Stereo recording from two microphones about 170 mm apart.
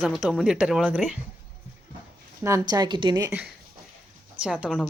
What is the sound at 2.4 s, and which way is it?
Speech, 20° right (ahead or behind).